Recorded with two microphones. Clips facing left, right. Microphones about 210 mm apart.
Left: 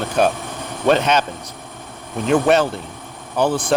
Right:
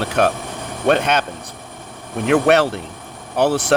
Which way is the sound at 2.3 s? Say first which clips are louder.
Right 1 dB; 65° right (ahead or behind).